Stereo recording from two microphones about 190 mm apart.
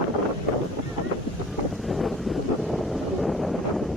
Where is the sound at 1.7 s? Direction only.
Centre (ahead or behind).